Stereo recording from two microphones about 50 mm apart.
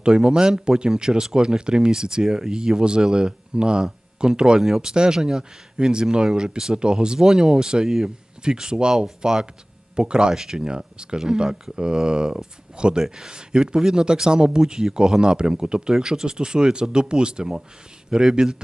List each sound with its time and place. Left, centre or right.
0.0 s speech: centre